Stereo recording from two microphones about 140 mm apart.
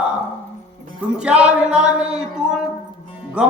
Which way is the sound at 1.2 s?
10° right (ahead or behind).